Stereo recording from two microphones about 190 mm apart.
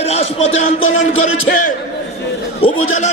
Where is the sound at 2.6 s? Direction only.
40° left (ahead or behind).